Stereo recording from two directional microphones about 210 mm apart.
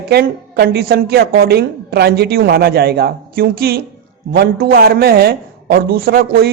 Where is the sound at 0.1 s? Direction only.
50° right (ahead or behind).